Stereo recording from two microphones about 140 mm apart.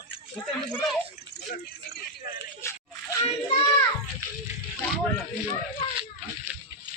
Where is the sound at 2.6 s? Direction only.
20° left (ahead or behind).